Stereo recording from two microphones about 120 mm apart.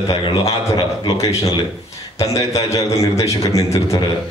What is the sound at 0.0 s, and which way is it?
Speech, 30° left (ahead or behind).